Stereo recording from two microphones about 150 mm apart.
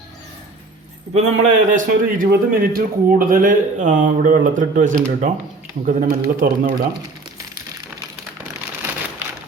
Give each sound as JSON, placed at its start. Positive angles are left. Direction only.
{"t": 1.1, "sound": "a man's voice", "side_deg": -60}